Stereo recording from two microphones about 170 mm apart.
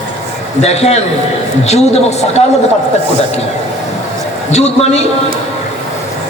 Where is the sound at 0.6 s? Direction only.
40° left (ahead or behind).